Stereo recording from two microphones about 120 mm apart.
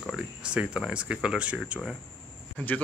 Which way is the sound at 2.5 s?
10° left (ahead or behind).